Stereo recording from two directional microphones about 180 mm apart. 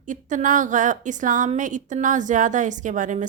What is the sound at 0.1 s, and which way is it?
A woman's voice, 45° right (ahead or behind).